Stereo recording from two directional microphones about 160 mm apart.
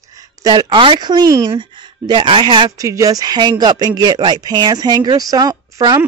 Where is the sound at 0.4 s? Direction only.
25° right (ahead or behind).